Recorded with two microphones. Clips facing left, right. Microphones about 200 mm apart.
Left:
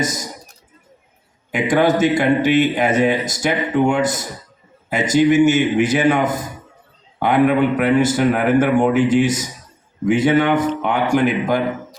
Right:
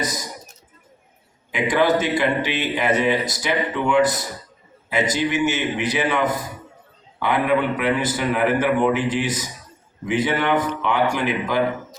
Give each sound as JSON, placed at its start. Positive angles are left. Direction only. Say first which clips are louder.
{"t": 0.0, "sound": "speech", "louder": "left 4 dB", "side_deg": 45}
{"t": 1.5, "sound": "speech", "louder": "left 3 dB", "side_deg": 45}